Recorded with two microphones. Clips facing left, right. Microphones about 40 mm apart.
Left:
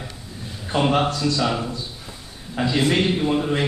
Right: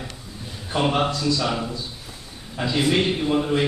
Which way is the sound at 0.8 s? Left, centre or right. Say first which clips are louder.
Left 2 dB; centre.